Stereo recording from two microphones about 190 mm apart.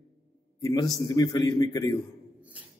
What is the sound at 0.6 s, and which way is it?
A man's voice, 20° left (ahead or behind).